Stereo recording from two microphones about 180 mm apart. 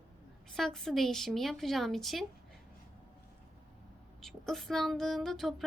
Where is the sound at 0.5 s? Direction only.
Centre (ahead or behind).